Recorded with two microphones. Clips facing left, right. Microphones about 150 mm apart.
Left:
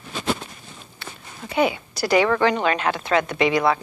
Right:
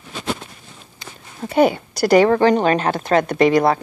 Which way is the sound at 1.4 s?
45° right (ahead or behind).